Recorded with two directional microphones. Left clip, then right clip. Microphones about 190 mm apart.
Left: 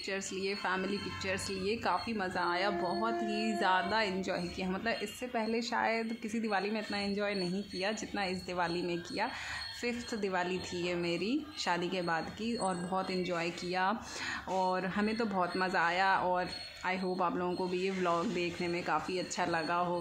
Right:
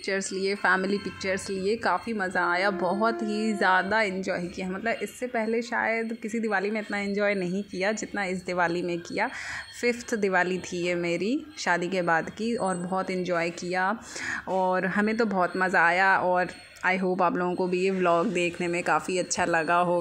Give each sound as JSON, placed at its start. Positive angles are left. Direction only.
{"t": 0.1, "sound": "a woman's voice", "side_deg": -30}